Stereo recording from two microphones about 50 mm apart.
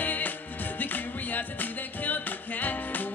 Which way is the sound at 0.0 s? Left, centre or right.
Left.